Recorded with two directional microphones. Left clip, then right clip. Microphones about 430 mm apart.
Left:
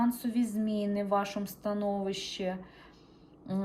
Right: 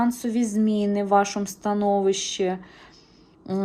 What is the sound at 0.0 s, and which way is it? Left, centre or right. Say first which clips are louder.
Speech: right 7 dB; centre.